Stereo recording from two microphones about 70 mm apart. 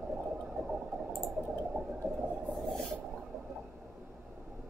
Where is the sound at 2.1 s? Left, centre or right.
Centre.